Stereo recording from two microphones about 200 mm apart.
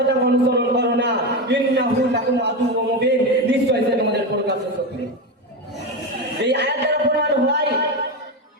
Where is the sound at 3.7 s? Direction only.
60° right (ahead or behind).